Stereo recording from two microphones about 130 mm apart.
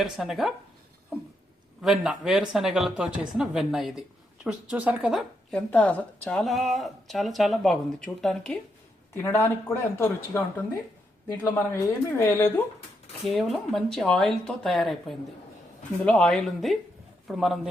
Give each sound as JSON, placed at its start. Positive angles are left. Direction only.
{"t": 0.0, "sound": "speech", "side_deg": 0}
{"t": 1.8, "sound": "a woman's voice", "side_deg": -5}
{"t": 5.5, "sound": "speech", "side_deg": 10}
{"t": 9.1, "sound": "speech", "side_deg": 20}
{"t": 11.4, "sound": "speech", "side_deg": 15}
{"t": 13.2, "sound": "speech", "side_deg": 0}